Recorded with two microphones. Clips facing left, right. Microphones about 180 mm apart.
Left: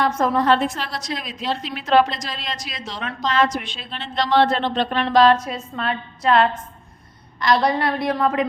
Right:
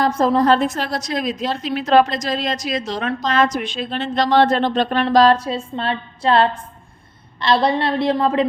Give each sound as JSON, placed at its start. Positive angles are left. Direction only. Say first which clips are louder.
{"t": 0.0, "sound": "a woman's voice", "louder": "right 3 dB", "side_deg": -30}